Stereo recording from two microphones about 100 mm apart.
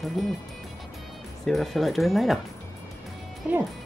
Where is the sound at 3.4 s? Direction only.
10° right (ahead or behind).